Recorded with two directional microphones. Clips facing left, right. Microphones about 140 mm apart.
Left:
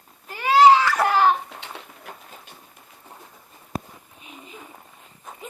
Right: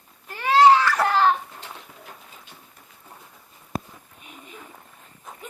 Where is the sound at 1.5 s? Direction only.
70° left (ahead or behind).